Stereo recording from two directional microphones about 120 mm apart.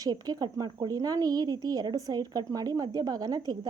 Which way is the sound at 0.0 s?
35° right (ahead or behind).